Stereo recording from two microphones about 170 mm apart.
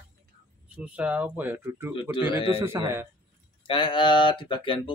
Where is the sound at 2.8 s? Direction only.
15° right (ahead or behind).